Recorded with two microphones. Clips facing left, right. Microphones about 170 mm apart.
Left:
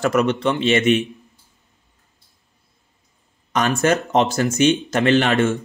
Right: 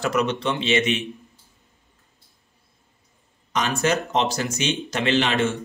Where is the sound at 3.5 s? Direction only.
50° left (ahead or behind).